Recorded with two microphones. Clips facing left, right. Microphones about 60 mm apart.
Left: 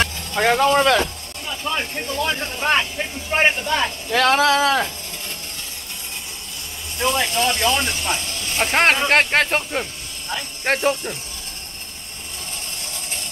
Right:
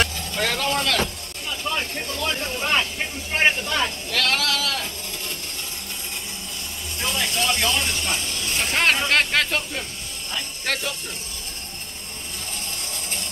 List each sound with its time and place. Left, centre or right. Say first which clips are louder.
0.0 s speech: left 4 dB; left
7.0 s speech: left 6 dB; left